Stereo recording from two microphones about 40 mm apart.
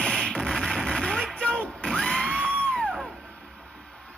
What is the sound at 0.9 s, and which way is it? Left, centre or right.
Vehicle, centre.